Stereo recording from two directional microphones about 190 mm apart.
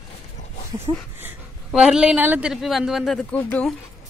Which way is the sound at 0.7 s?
10° right (ahead or behind).